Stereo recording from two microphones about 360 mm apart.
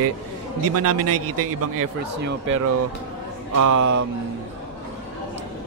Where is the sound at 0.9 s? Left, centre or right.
Right.